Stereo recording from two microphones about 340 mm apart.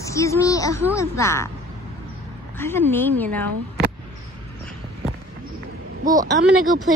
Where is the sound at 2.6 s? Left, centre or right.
Centre.